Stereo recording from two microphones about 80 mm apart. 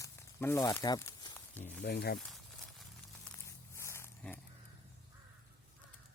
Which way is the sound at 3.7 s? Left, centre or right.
Left.